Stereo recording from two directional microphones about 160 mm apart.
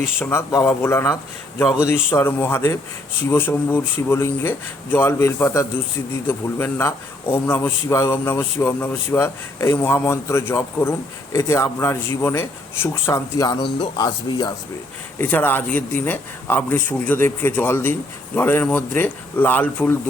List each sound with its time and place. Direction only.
0.0 s a man's voice: 15° left (ahead or behind)
15.2 s a man's voice: 10° left (ahead or behind)